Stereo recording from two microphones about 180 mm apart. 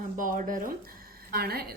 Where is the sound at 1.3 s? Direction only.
60° right (ahead or behind).